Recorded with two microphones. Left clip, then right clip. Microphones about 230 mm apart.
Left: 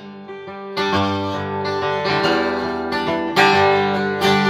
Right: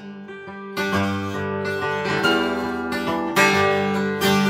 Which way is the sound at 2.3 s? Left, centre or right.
Centre.